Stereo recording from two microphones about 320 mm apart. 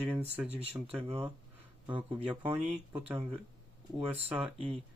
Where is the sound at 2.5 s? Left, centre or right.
Centre.